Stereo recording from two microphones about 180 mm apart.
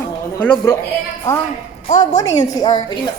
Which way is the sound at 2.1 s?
20° left (ahead or behind).